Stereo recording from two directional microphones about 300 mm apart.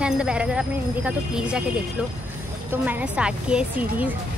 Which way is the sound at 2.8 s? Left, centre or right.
Centre.